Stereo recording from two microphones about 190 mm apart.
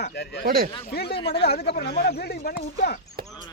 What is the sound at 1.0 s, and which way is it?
Speech, 30° left (ahead or behind).